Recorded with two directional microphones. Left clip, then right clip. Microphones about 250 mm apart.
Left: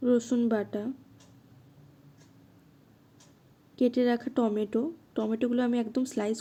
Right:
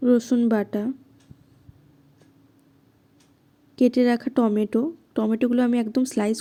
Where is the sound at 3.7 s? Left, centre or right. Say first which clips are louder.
Right 6 dB; right.